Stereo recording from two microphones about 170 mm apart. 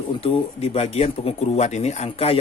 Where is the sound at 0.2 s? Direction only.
35° left (ahead or behind).